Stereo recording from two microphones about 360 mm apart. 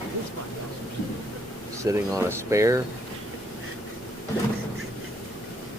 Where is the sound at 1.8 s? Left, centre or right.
Centre.